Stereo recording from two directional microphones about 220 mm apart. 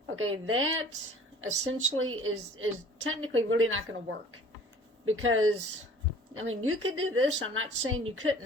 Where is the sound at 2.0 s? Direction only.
70° right (ahead or behind).